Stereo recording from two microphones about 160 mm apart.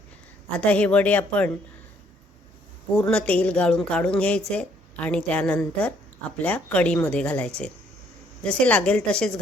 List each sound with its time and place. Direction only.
0.6 s speech: 10° left (ahead or behind)
2.9 s speech: 5° left (ahead or behind)